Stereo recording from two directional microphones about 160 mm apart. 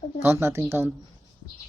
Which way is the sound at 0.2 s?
15° right (ahead or behind).